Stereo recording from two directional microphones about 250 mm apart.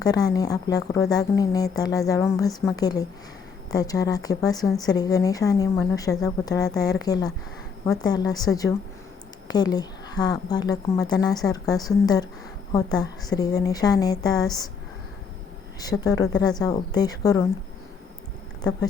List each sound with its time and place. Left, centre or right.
0.0 s a woman's voice: centre
4.5 s a woman's voice: centre
4.8 s a woman's voice: centre
15.8 s a woman's voice: centre